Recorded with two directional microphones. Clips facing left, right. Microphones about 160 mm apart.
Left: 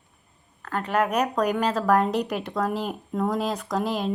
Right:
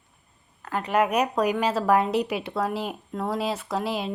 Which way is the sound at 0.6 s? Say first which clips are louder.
Right 1 dB; 10° right (ahead or behind).